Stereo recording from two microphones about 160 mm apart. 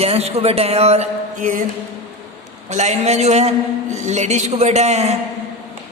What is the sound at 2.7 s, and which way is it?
A man's voice, 45° right (ahead or behind).